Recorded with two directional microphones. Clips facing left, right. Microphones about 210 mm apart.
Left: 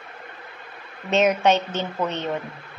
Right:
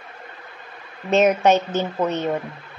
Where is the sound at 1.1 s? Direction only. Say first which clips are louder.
Right 3 dB; 5° right (ahead or behind).